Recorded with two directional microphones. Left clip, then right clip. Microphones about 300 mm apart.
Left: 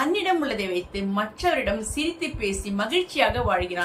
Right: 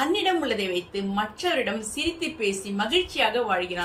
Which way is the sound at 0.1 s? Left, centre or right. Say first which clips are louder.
Even; centre.